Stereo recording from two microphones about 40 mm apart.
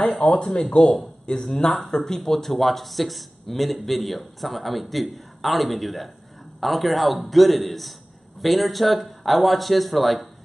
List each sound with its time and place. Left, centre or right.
0.2 s speech: left; by 10.3 s centre